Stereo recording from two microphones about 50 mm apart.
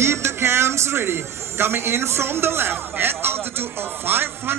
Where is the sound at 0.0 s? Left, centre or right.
Right.